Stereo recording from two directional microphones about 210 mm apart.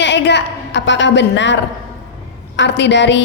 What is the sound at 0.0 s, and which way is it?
A woman's voice, 55° left (ahead or behind).